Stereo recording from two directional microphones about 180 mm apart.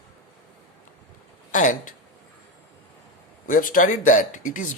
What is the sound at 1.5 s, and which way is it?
Speech, 45° left (ahead or behind).